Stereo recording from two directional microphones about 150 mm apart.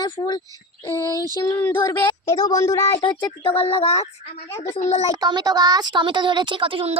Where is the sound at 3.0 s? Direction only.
35° left (ahead or behind); by 5.0 s 50° left (ahead or behind).